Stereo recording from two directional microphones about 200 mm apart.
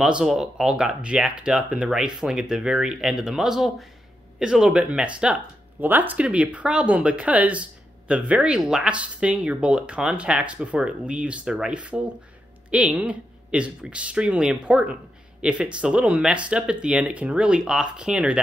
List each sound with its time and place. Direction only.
0.0 s speech: 5° right (ahead or behind)